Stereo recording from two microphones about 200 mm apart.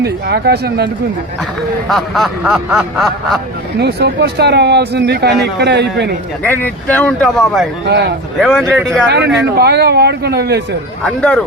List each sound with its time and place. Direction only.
0.0 s speech: 55° right (ahead or behind)
1.9 s snicker: centre (ahead or behind)
3.8 s speech: 55° right (ahead or behind)
6.4 s speech: 10° left (ahead or behind)
7.9 s speech: 55° right (ahead or behind)
8.4 s snicker: centre (ahead or behind)
9.0 s speech: 55° right (ahead or behind)
11.0 s snicker: 5° left (ahead or behind)